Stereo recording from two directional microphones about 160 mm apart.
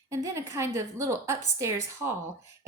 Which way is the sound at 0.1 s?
20° right (ahead or behind).